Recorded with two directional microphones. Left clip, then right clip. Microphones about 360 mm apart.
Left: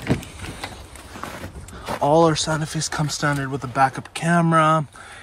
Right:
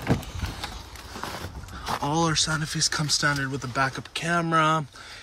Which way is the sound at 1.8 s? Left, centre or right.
Centre.